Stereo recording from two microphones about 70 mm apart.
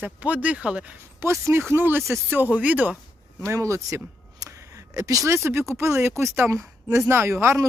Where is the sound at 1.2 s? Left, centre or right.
Right.